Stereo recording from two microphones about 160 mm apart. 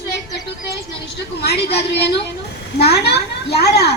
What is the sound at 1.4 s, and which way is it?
A woman's voice, 90° left.